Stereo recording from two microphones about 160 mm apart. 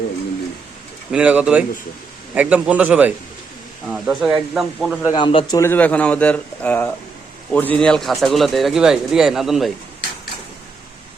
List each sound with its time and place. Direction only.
1.1 s a man's voice: 5° right (ahead or behind)
5.0 s speech: 30° left (ahead or behind)
5.5 s speech: 15° left (ahead or behind)